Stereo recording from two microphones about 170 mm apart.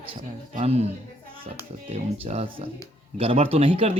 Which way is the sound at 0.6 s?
40° right (ahead or behind).